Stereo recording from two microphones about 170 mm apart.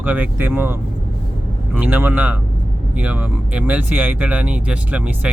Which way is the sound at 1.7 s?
10° right (ahead or behind).